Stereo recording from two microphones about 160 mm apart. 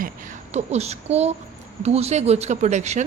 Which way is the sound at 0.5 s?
40° right (ahead or behind).